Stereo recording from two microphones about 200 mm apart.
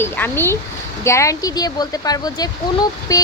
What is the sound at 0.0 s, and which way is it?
A woman's voice, 10° left (ahead or behind).